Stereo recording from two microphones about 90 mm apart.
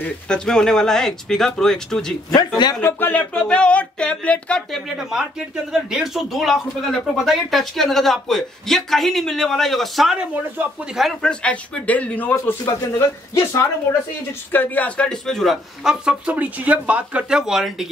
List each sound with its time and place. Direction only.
0.3 s a sound: 5° left (ahead or behind)
2.3 s speech: 50° left (ahead or behind)
2.8 s a sound: 20° left (ahead or behind)
4.8 s speech: 5° right (ahead or behind)
10.6 s speech: 20° right (ahead or behind)
11.0 s speech: centre (ahead or behind)
11.4 s a sound: 15° left (ahead or behind)
12.6 s speech: 40° left (ahead or behind)
14.5 s speech: 20° left (ahead or behind); by 17.8 s 5° right (ahead or behind)